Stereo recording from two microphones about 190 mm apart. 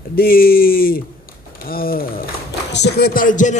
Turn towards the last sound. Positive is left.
turn(degrees=45)  # may be behind; listen again after turning